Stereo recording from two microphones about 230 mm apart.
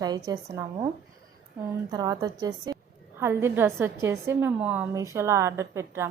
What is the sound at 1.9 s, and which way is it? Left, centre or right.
A woman's voice, centre.